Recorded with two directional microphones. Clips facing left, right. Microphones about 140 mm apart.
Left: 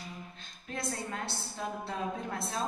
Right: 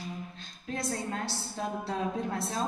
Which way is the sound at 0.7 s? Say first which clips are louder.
Right 4 dB; 35° right (ahead or behind).